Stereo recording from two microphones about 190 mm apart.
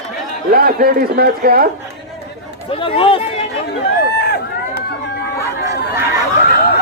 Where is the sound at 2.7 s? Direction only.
30° left (ahead or behind).